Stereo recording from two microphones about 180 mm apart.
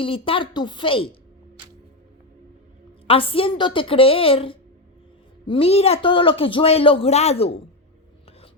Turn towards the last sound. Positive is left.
turn(degrees=35)  # may be behind; listen again after turning